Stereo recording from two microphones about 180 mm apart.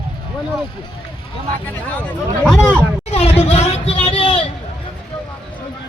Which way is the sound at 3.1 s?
35° left (ahead or behind).